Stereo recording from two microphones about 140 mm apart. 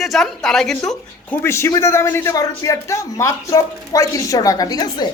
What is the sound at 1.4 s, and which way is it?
A man's voice, 20° left (ahead or behind).